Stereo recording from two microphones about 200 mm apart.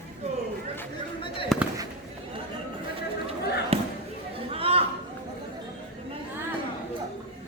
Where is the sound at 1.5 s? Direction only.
Centre (ahead or behind).